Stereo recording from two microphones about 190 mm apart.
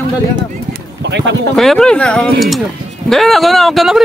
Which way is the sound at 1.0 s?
70° right (ahead or behind).